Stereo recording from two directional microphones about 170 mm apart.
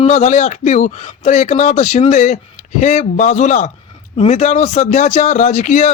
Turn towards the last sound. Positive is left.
turn(degrees=45)  # may be behind; listen again after turning